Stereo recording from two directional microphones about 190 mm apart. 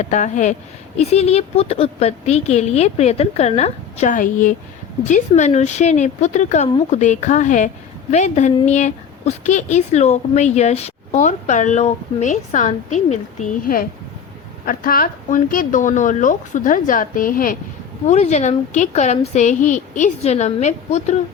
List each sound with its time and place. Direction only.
0.0 s a woman's voice: 40° left (ahead or behind)
18.1 s a woman's voice: 35° left (ahead or behind)